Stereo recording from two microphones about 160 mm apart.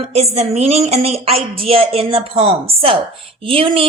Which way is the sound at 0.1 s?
40° right (ahead or behind).